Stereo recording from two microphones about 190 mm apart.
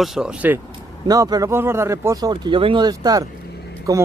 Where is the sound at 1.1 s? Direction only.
20° right (ahead or behind).